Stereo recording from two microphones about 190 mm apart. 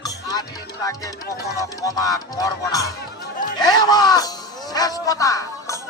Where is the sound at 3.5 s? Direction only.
20° left (ahead or behind).